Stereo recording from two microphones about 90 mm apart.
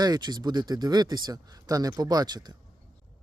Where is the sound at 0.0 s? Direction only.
45° right (ahead or behind).